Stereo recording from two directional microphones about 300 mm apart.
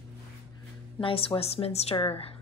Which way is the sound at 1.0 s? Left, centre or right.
Centre.